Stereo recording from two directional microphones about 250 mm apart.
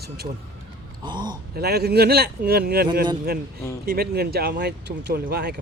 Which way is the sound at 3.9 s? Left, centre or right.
Right.